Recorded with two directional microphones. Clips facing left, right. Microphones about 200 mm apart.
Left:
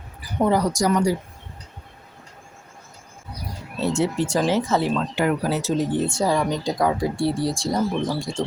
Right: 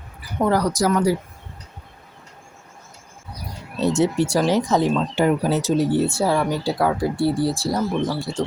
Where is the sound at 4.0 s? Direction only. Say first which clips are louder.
Right 2 dB; 10° right (ahead or behind).